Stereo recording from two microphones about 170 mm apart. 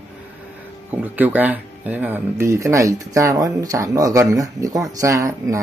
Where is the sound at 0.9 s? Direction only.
10° right (ahead or behind).